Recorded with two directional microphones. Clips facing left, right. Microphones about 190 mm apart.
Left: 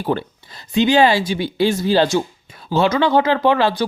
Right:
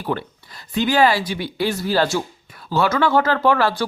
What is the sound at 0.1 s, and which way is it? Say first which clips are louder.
Speech: left 3 dB; 30° left (ahead or behind).